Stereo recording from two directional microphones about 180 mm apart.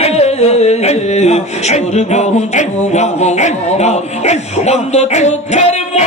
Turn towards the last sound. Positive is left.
turn(degrees=40)  # may be behind; listen again after turning